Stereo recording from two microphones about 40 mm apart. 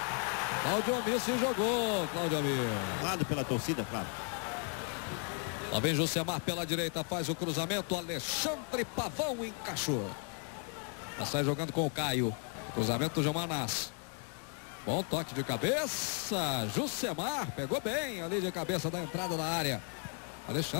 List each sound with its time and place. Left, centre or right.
0.0 s a sound: centre
1.4 s speech: centre
11.1 s speech: centre
14.9 s speech: centre